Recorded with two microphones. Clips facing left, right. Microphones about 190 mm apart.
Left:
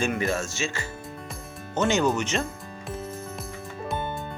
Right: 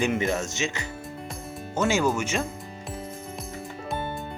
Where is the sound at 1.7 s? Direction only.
10° right (ahead or behind).